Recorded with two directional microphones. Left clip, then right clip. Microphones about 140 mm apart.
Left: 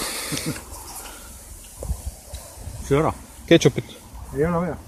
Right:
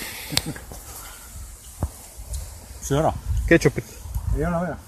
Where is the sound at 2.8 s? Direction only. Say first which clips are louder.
Left 1 dB; 70° right (ahead or behind).